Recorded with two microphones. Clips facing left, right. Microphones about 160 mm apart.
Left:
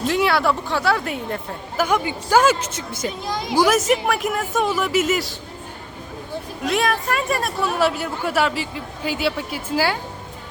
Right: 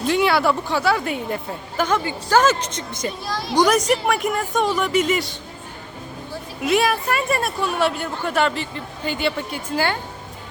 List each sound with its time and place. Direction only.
0.0 s a woman's voice: centre (ahead or behind)
3.2 s a woman's voice: 20° left (ahead or behind)
3.5 s speech: 5° left (ahead or behind)
6.7 s speech: centre (ahead or behind)